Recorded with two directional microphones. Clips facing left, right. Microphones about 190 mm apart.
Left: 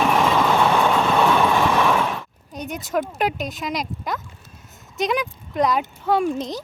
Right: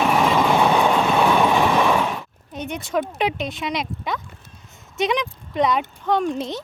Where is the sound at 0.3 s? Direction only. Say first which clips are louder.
Right 1 dB; 15° right (ahead or behind).